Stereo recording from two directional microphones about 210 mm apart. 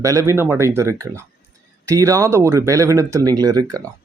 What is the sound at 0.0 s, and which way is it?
Speech, 15° right (ahead or behind).